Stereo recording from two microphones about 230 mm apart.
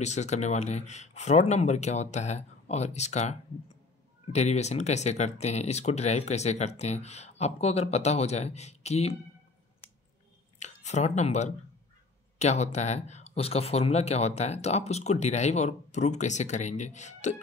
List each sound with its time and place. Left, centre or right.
0.0 s speech: left
10.6 s speech: left